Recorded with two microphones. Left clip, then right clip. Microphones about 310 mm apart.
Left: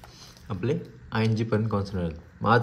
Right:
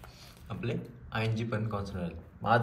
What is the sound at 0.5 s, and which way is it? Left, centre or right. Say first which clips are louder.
Speech: left 8 dB; left.